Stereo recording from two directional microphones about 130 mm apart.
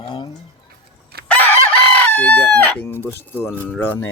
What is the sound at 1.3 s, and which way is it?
Chicken, 15° left (ahead or behind).